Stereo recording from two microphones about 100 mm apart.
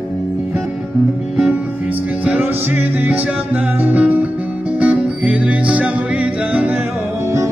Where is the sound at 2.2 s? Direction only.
15° right (ahead or behind).